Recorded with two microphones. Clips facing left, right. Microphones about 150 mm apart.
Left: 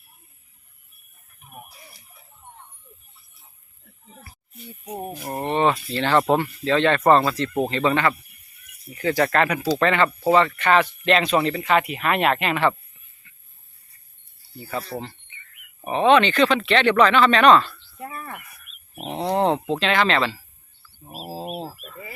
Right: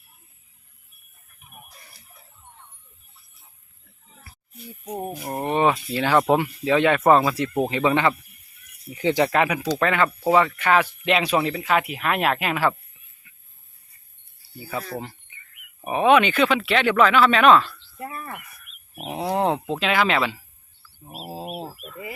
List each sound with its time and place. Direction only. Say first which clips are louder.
4.5 s speech: right 1 dB; 5° right (ahead or behind)
13.2 s a sound: even; 10° right (ahead or behind)
14.6 s speech: left 1 dB; 5° right (ahead or behind)